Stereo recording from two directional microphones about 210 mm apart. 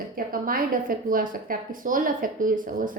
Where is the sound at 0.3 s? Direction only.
40° right (ahead or behind).